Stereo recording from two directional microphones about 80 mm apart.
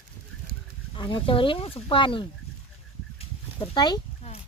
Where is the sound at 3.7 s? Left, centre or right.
Left.